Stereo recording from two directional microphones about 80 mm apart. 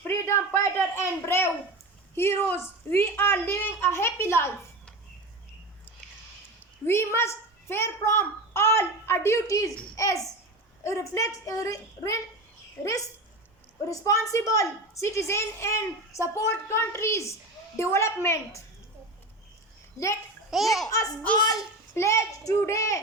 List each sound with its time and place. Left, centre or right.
0.1 s a sound: left
2.1 s a woman's voice: left
6.6 s a woman's voice: left
13.9 s a woman's voice: left
20.5 s a child's voice: centre
20.8 s a woman's voice: left